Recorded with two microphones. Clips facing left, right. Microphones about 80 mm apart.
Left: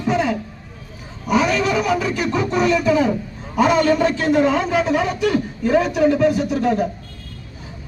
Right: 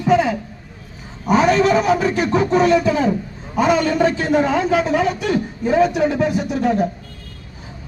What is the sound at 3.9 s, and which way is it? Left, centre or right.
Speech, right.